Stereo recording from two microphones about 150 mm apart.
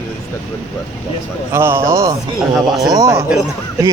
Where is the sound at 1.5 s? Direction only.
15° right (ahead or behind).